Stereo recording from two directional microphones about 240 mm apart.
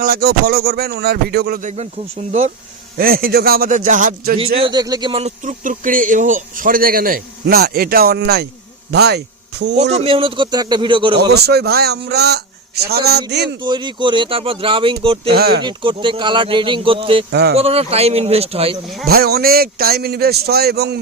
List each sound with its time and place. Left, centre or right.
0.0 s speech: right
3.0 s speech: right
4.6 s a man's voice: centre; by 9.7 s right
9.9 s a man's voice: right
11.3 s speech: right
13.6 s a man's voice: centre
15.3 s speech: right
15.6 s a man's voice: centre
19.0 s speech: right